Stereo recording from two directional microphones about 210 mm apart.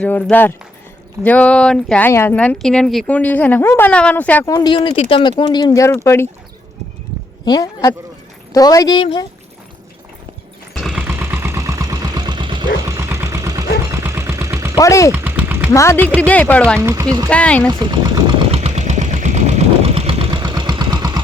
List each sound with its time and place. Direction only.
0.0 s speech: 5° left (ahead or behind)
7.4 s speech: 20° left (ahead or behind)
10.8 s vehicle: centre (ahead or behind)
13.9 s a sound: 15° right (ahead or behind)
14.8 s speech: 15° left (ahead or behind)
15.1 s vehicle: 10° right (ahead or behind)
15.7 s speech: 15° left (ahead or behind)
16.7 s speech: 10° right (ahead or behind)
17.2 s speech: 5° left (ahead or behind)
17.7 s engine: 20° right (ahead or behind)